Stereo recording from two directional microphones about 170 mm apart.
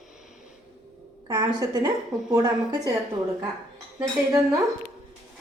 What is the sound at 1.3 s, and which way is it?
A woman's voice, 25° right (ahead or behind).